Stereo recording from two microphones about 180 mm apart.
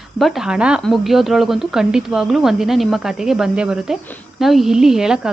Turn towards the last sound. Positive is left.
turn(degrees=-5)  # may be behind; listen again after turning